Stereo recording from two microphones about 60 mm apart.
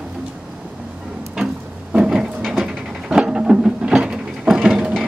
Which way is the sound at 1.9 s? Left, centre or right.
Centre.